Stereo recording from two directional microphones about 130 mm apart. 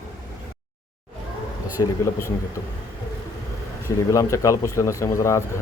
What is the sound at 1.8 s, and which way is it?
Speech, 25° left (ahead or behind).